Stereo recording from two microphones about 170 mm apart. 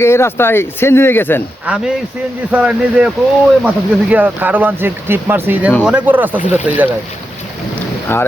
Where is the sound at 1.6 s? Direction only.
5° right (ahead or behind).